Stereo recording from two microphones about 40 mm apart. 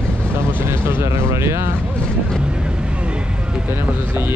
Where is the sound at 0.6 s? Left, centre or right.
Right.